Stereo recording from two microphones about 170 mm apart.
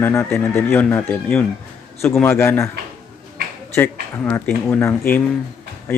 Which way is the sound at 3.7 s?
10° left (ahead or behind).